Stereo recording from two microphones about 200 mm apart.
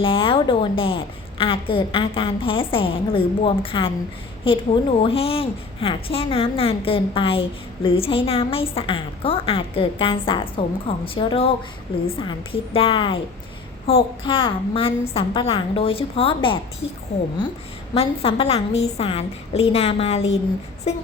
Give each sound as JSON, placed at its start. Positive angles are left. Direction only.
{"t": 0.0, "sound": "a woman's voice", "side_deg": 25}
{"t": 14.3, "sound": "a woman's voice", "side_deg": 25}
{"t": 17.9, "sound": "a woman's voice", "side_deg": 30}